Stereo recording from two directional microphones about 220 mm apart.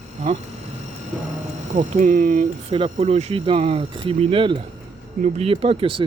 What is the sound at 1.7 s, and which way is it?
Speech, 35° right (ahead or behind).